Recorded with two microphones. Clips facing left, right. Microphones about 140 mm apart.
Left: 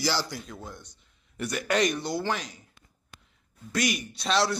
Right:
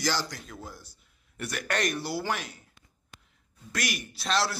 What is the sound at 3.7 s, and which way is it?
Speech, centre (ahead or behind).